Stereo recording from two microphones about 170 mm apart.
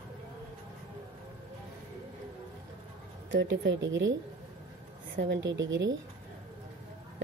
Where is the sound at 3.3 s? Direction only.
90° right.